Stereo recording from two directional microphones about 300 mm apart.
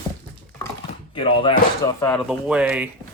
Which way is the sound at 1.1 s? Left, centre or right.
Centre.